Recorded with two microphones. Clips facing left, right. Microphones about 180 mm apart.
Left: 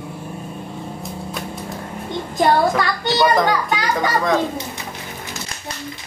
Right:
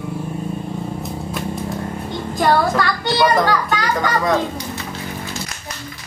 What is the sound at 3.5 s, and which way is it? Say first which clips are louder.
Speech: right 1 dB; 15° left (ahead or behind).